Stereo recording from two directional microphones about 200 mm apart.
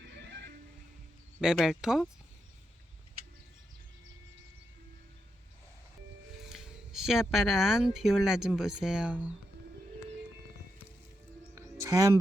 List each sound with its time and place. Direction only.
0.0 s music: 55° right (ahead or behind)
1.4 s speech: 5° right (ahead or behind)
6.4 s speech: centre (ahead or behind)
11.5 s music: 15° right (ahead or behind)